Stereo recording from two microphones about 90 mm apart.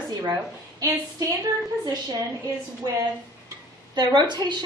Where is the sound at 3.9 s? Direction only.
50° right (ahead or behind).